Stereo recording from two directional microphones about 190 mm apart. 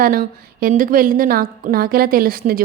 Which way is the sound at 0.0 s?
50° right (ahead or behind).